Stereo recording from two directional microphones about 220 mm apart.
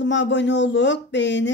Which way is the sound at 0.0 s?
55° left (ahead or behind).